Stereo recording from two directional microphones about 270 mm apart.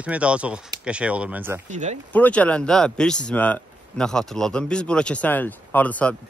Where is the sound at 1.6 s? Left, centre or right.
Right.